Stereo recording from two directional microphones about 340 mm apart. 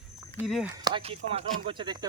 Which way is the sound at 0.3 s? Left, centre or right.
Centre.